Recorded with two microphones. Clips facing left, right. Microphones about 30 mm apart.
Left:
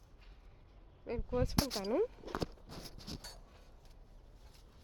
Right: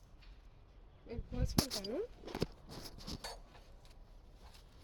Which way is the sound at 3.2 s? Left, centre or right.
Right.